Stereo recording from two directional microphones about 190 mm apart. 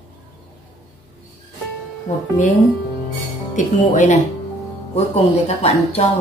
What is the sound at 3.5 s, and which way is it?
Speech, 45° left (ahead or behind).